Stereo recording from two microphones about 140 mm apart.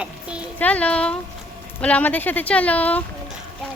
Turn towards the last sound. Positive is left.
turn(degrees=10)  # may be behind; listen again after turning